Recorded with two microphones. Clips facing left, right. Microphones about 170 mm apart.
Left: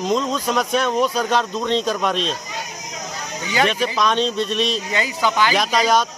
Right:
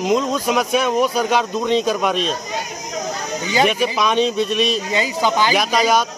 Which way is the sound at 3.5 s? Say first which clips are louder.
Right 2 dB; 10° right (ahead or behind).